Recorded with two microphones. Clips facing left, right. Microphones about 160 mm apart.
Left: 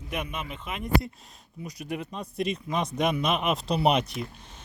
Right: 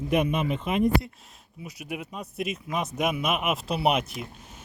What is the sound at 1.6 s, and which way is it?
Speech, 5° right (ahead or behind).